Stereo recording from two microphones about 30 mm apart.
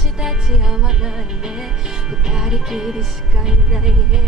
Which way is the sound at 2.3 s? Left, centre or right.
Centre.